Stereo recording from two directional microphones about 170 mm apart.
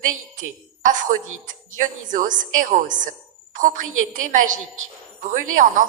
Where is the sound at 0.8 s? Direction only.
50° right (ahead or behind).